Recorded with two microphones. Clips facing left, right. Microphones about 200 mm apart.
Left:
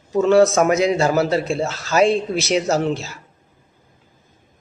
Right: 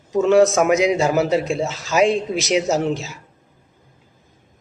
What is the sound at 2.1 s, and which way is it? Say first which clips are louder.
Speech: left 1 dB; 35° left (ahead or behind).